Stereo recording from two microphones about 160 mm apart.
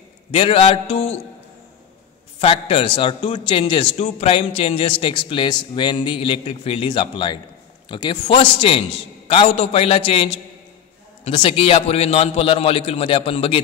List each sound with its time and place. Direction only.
0.3 s a man's voice: 35° left (ahead or behind)
2.3 s a man's voice: 35° left (ahead or behind)